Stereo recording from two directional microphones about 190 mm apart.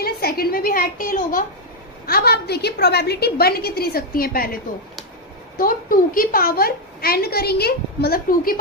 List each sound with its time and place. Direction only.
0.0 s a woman's voice: 55° left (ahead or behind)